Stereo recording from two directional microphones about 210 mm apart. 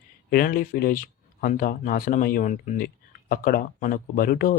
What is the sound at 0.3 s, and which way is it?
Speech, 45° left (ahead or behind).